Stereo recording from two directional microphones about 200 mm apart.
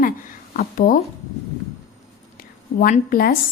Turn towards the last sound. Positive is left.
turn(degrees=45)  # may be behind; listen again after turning